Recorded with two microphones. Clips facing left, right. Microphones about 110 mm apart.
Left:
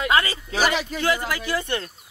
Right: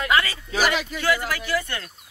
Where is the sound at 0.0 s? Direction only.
20° left (ahead or behind).